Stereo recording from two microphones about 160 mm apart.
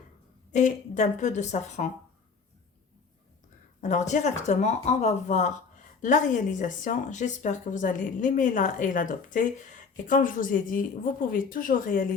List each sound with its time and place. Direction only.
0.5 s speech: 50° left (ahead or behind)
3.8 s speech: 50° left (ahead or behind)